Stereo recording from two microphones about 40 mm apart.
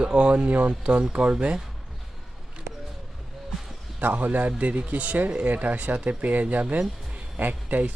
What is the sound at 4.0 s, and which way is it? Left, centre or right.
Speech, right.